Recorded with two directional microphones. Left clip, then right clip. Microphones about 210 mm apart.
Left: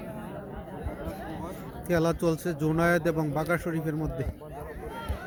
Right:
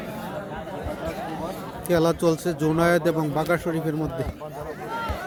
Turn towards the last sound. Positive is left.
turn(degrees=0)  # may be behind; listen again after turning